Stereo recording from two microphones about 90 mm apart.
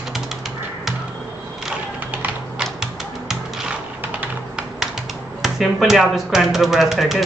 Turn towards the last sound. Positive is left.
turn(degrees=-5)  # may be behind; listen again after turning